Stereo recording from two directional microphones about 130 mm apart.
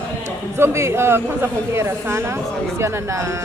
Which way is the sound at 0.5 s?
20° right (ahead or behind).